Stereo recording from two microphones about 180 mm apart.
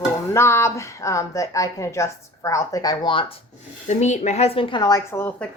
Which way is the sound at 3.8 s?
40° left (ahead or behind).